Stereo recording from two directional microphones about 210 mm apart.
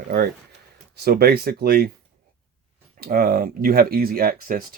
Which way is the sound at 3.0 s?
45° right (ahead or behind).